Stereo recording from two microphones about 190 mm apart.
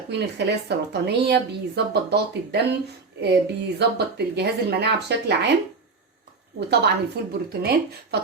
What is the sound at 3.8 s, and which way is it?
Speech, 60° right (ahead or behind).